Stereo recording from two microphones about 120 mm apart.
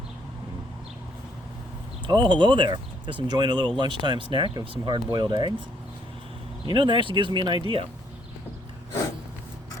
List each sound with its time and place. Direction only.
2.0 s speech: 40° right (ahead or behind)
6.7 s speech: 40° right (ahead or behind)